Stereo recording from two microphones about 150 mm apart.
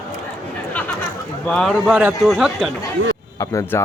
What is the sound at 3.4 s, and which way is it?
Speech, 20° left (ahead or behind).